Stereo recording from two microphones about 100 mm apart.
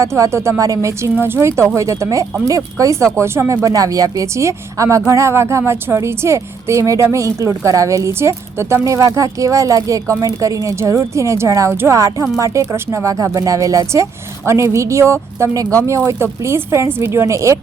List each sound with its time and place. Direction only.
0.0 s a woman's voice: 30° right (ahead or behind)